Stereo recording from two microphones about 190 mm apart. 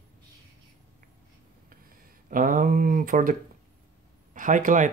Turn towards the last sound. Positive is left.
turn(degrees=-40)  # may be behind; listen again after turning